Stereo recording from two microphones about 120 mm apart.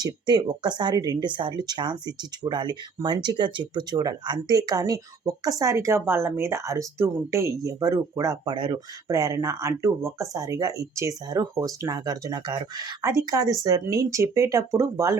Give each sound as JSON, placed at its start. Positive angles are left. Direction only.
{"t": 0.0, "sound": "speech", "side_deg": -35}